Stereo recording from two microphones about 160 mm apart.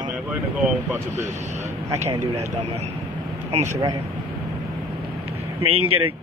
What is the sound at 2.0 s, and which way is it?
Speech, 45° right (ahead or behind).